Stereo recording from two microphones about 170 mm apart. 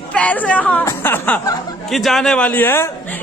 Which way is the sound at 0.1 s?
10° left (ahead or behind).